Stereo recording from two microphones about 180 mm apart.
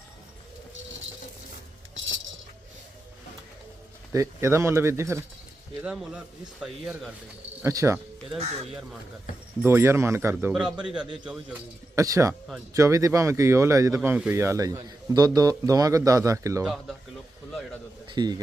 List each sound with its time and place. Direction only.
2.0 s music: 90° right
4.1 s a man's voice: 15° right (ahead or behind)
7.6 s a man's voice: 15° right (ahead or behind)
9.6 s a man's voice: 15° right (ahead or behind)
11.0 s a man's voice: 25° right (ahead or behind)
16.6 s speech: 5° right (ahead or behind)
18.1 s a man's voice: 25° right (ahead or behind)